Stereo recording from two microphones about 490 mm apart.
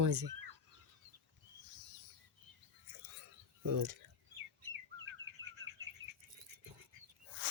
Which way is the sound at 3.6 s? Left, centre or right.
Right.